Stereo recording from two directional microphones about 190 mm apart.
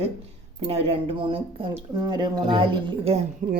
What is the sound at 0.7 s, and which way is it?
A woman's voice, 30° right (ahead or behind).